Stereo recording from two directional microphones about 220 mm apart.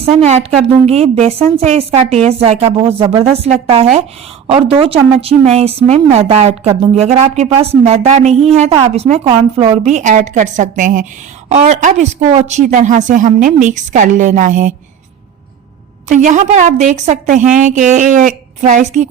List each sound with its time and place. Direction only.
0.0 s a woman's voice: 30° right (ahead or behind)
16.0 s speech: 35° right (ahead or behind)